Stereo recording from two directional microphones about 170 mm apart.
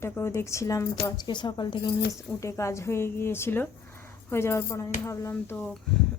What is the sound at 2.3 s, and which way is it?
Speech, 15° left (ahead or behind).